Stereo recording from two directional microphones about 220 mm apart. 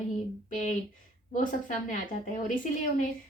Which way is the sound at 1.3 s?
35° left (ahead or behind).